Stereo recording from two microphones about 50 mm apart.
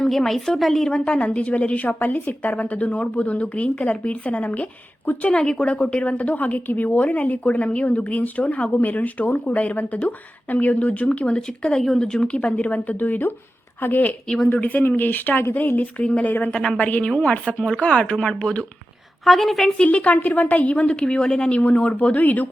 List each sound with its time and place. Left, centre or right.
0.0 s a woman's voice: centre; by 5.3 s left
5.3 s a woman's voice: centre
11.3 s a woman's voice: centre
12.0 s a woman's voice: centre; by 14.2 s left
14.3 s speech: centre
14.5 s speech: left
16.5 s a woman's voice: centre
17.4 s speech: centre
19.2 s a woman's voice: centre
19.8 s a woman's voice: left
21.6 s speech: left